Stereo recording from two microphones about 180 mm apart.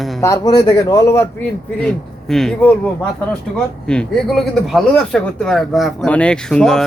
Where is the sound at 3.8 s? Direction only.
5° left (ahead or behind).